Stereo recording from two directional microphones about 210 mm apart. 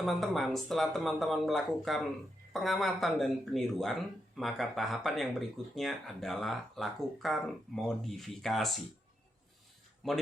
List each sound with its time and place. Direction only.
0.0 s speech: centre (ahead or behind)
10.0 s speech: centre (ahead or behind)